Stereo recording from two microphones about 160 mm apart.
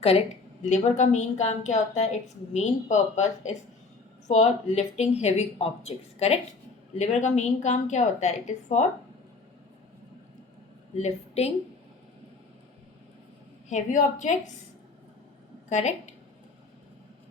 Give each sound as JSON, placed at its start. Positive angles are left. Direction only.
{"t": 0.6, "sound": "speech", "side_deg": 50}
{"t": 10.9, "sound": "a woman's voice", "side_deg": 40}
{"t": 13.7, "sound": "speech", "side_deg": 50}
{"t": 15.7, "sound": "speech", "side_deg": 45}